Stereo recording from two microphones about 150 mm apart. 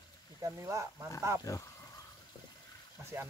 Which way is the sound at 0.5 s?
20° right (ahead or behind).